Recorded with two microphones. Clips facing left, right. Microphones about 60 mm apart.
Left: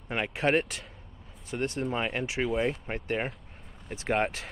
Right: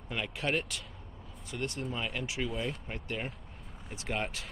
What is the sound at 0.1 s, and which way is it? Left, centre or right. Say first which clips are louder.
Speech: left 7 dB; left.